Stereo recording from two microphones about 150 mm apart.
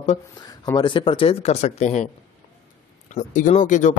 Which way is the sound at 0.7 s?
35° left (ahead or behind).